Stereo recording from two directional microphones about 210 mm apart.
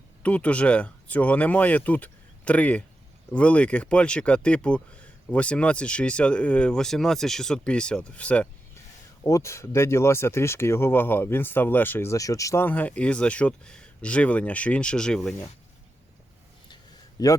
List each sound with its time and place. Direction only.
0.2 s speech: 5° left (ahead or behind)
17.2 s speech: 20° left (ahead or behind)